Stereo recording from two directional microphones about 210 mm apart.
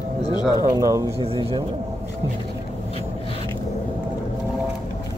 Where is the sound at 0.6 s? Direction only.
15° right (ahead or behind).